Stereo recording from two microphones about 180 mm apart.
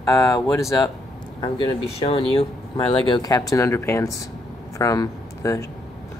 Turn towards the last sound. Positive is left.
turn(degrees=20)  # may be behind; listen again after turning